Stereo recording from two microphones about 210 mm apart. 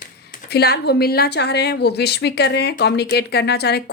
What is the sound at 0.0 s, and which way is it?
A woman's voice, 45° left (ahead or behind).